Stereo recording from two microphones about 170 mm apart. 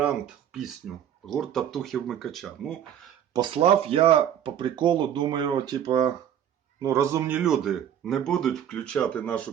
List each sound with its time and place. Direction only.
0.5 s speech: centre (ahead or behind)
3.3 s a man's voice: 30° right (ahead or behind)
7.3 s speech: 5° right (ahead or behind)